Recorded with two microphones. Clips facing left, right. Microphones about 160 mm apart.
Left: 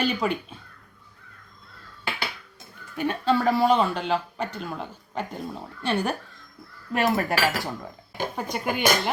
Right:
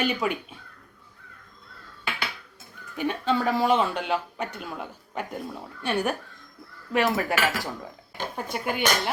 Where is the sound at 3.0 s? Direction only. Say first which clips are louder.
Left 2 dB; 10° right (ahead or behind).